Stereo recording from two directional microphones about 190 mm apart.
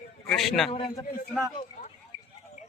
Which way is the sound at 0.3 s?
Centre (ahead or behind).